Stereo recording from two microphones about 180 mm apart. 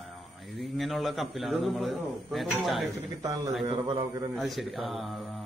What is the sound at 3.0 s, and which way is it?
A man's voice, 20° right (ahead or behind).